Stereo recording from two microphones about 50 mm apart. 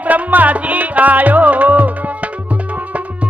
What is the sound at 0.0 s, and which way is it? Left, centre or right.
Music, right.